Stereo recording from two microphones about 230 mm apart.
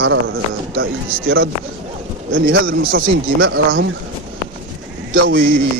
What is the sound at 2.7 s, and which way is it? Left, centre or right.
Speech, right.